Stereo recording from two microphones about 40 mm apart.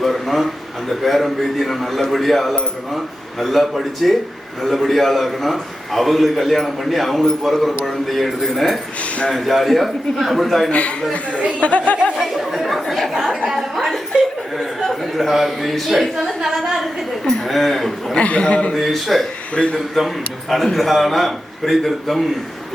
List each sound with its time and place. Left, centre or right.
0.0 s a man's voice: centre
10.7 s speech: left
11.3 s speech: right
11.6 s speech: left
12.1 s a man's voice: centre
17.2 s a man's voice: centre
18.2 s speech: left
18.7 s a man's voice: centre